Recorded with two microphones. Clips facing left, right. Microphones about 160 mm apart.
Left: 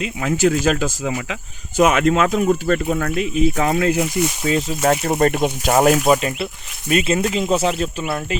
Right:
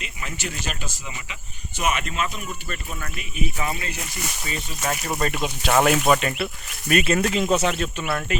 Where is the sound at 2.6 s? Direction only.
65° left (ahead or behind); by 4.1 s 90° left.